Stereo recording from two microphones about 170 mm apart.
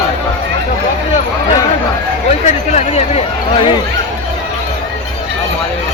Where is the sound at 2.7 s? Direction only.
40° left (ahead or behind).